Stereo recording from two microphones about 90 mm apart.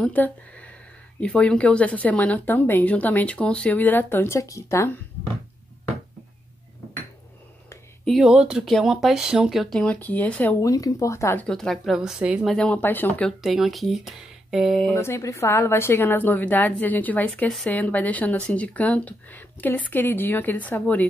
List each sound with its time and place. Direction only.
0.0 s speech: 15° left (ahead or behind); by 4.8 s 35° left (ahead or behind)
8.0 s speech: centre (ahead or behind)
9.8 s speech: 15° left (ahead or behind)
10.6 s speech: 40° left (ahead or behind)
11.4 s speech: 5° left (ahead or behind); by 12.4 s 10° right (ahead or behind)
12.4 s speech: 10° left (ahead or behind)
12.8 s a woman's voice: 20° left (ahead or behind)
13.4 s speech: centre (ahead or behind)
15.0 s a woman's voice: 30° left (ahead or behind)